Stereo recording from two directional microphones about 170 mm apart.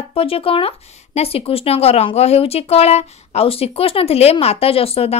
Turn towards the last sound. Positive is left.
turn(degrees=35)  # may be behind; listen again after turning